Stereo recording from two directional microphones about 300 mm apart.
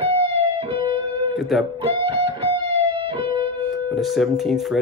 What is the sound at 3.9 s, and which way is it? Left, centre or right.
Speech, centre.